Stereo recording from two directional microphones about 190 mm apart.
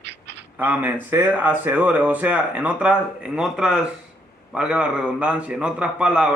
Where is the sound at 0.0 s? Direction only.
65° right (ahead or behind).